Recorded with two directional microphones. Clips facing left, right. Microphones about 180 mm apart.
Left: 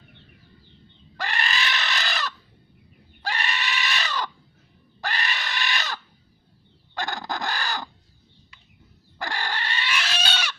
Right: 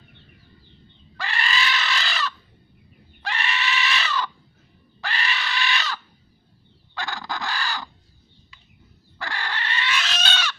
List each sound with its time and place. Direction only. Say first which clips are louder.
1.1 s screaming: right 1 dB; 45° left (ahead or behind)
3.2 s goat: right 2 dB; 40° left (ahead or behind)
4.9 s pig: right 1 dB; 40° left (ahead or behind)
6.9 s fowl: left 1 dB; 50° left (ahead or behind)
9.1 s squeal: left 1 dB; 40° left (ahead or behind)
9.9 s pig: left 1 dB; 10° left (ahead or behind)